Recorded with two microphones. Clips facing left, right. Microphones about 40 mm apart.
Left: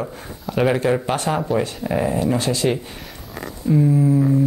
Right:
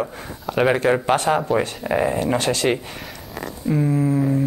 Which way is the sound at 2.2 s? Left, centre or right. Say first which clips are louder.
Even; right.